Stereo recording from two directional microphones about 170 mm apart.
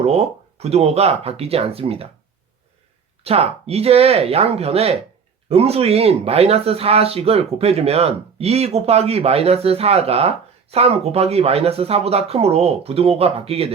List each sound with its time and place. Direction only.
0.0 s speech: 40° right (ahead or behind)
3.2 s speech: 35° right (ahead or behind)